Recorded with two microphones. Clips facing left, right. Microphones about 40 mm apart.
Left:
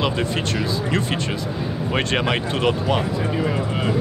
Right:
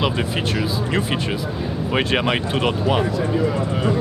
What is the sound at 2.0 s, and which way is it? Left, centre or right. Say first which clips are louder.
Speech: right 2 dB; centre.